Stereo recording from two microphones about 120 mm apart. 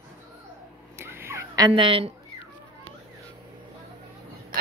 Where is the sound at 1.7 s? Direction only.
45° right (ahead or behind).